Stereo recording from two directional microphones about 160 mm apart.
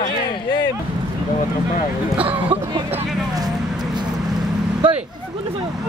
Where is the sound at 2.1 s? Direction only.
10° right (ahead or behind).